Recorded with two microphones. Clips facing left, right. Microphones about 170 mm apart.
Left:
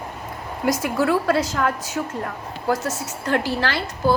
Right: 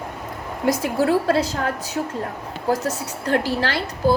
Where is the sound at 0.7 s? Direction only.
30° right (ahead or behind).